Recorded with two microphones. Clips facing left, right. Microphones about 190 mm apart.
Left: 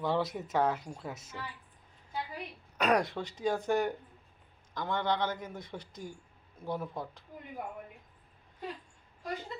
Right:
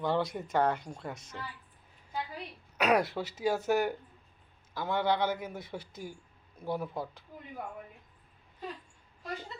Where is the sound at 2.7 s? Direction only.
5° right (ahead or behind).